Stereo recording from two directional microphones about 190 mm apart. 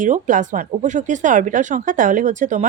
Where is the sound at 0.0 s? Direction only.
40° right (ahead or behind).